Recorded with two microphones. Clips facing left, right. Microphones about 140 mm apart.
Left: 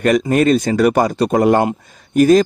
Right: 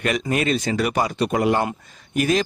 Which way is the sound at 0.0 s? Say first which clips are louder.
Left 9 dB; 45° left (ahead or behind).